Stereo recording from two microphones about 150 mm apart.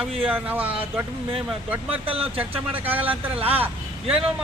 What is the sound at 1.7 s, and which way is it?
A man's voice, 10° right (ahead or behind).